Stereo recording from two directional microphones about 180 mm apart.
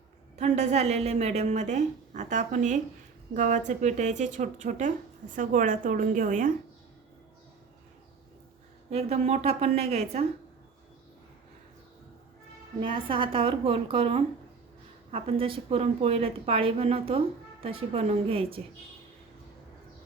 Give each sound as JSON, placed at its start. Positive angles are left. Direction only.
{"t": 0.3, "sound": "a woman's voice", "side_deg": -40}
{"t": 8.9, "sound": "a woman's voice", "side_deg": -35}
{"t": 12.8, "sound": "a woman's voice", "side_deg": -30}